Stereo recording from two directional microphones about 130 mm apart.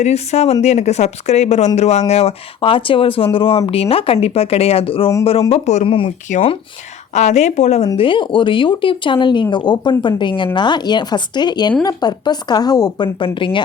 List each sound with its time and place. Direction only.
0.0 s speech: 55° left (ahead or behind)
5.5 s speech: 55° left (ahead or behind)
6.3 s speech: 80° left
7.1 s speech: 60° left (ahead or behind)
7.9 s speech: 40° left (ahead or behind)